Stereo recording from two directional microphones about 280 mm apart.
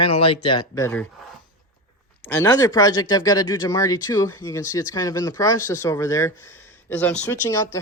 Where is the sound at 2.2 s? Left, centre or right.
Centre.